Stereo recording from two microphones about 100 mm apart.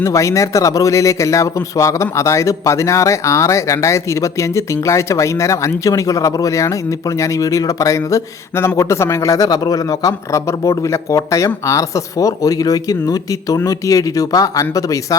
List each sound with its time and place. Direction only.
0.0 s a man's voice: 30° left (ahead or behind)